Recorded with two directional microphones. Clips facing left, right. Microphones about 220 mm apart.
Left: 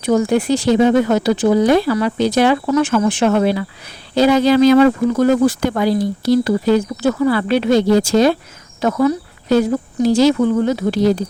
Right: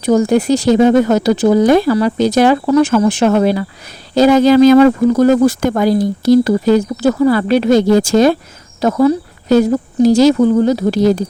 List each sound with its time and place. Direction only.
0.0 s speech: 40° right (ahead or behind)
8.8 s speech: 35° right (ahead or behind)